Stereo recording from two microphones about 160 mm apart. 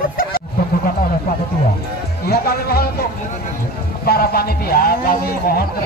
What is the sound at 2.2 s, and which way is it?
Speech, 75° left (ahead or behind).